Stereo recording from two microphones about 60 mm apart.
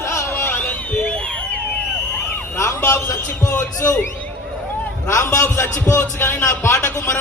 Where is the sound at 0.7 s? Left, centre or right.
Left.